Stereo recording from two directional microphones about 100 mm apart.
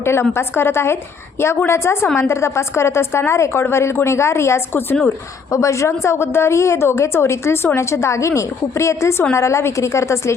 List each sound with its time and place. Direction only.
0.0 s a woman's voice: 25° left (ahead or behind)